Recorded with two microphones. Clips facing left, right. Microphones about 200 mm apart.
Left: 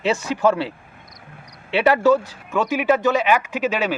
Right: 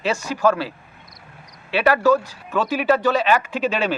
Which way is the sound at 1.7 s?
20° left (ahead or behind).